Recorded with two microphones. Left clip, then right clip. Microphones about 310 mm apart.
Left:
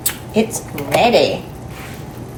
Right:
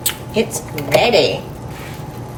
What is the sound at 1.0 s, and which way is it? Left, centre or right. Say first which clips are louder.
Speech: left 1 dB; centre.